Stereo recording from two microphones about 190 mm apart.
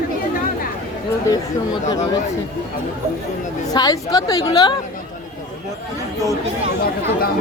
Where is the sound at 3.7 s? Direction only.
20° left (ahead or behind).